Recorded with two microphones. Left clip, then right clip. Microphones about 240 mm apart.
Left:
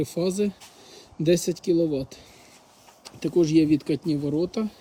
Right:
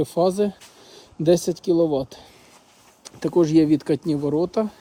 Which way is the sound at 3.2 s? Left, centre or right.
Centre.